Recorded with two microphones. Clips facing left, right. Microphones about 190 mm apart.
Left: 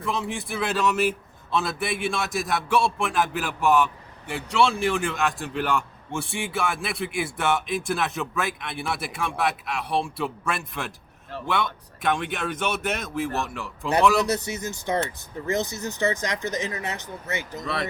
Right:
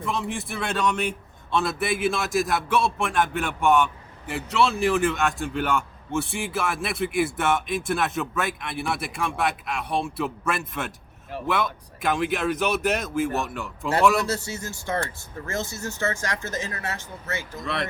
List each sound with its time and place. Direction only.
0.0 s a man's voice: centre (ahead or behind)
14.3 s speech: 20° left (ahead or behind)